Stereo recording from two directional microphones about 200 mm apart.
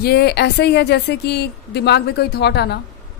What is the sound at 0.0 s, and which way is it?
A woman's voice, 55° left (ahead or behind).